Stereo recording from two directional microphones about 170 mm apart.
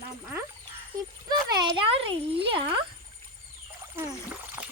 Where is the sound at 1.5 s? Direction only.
30° right (ahead or behind).